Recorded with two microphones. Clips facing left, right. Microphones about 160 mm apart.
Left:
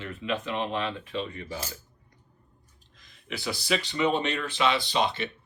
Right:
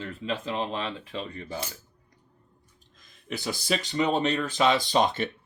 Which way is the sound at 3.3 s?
45° right (ahead or behind).